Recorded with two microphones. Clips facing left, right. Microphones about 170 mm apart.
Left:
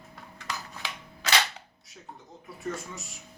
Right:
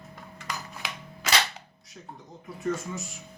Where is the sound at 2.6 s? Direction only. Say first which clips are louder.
Right 5 dB; centre (ahead or behind).